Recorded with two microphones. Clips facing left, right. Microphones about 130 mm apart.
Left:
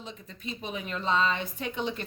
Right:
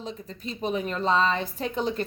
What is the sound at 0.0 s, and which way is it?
A woman's voice, 40° right (ahead or behind).